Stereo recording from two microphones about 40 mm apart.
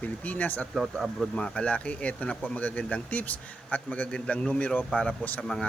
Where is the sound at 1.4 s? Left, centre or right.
Left.